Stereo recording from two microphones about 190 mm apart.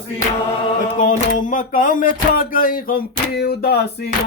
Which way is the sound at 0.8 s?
45° left (ahead or behind).